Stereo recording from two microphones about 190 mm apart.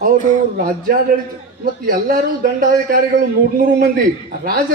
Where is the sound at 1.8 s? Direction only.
50° right (ahead or behind).